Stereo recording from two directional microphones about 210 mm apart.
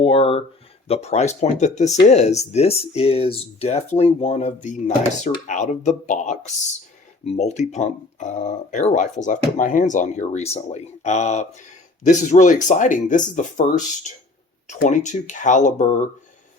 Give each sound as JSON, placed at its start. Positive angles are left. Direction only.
{"t": 0.0, "sound": "speech", "side_deg": 25}